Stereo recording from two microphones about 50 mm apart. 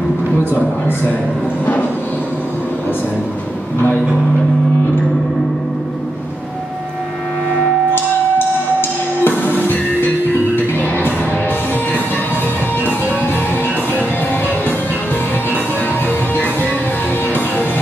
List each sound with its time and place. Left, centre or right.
9.2 s music: left
12.8 s music: left